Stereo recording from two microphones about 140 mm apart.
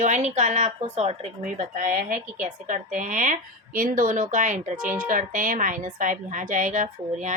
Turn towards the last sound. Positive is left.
turn(degrees=-65)  # may be behind; listen again after turning